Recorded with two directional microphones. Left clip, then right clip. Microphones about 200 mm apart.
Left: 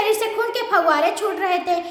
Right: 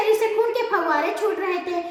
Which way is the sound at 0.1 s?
15° left (ahead or behind).